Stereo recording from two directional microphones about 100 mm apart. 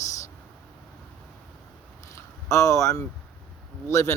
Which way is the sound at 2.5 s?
30° left (ahead or behind).